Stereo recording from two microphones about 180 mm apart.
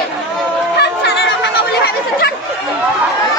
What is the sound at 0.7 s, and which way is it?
Chatter, 65° left (ahead or behind).